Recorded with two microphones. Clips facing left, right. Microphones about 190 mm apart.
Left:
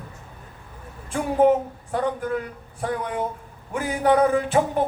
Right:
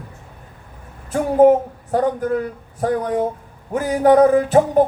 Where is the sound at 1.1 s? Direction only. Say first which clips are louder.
Right 6 dB; 40° right (ahead or behind).